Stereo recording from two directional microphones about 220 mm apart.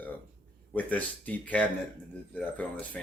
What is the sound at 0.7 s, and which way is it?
Speech, 5° left (ahead or behind).